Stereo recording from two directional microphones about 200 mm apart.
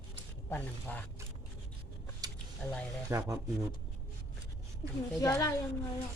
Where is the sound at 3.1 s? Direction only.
15° right (ahead or behind).